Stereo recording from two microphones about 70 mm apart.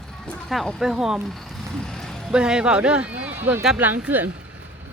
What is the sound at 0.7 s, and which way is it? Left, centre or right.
Speech, centre.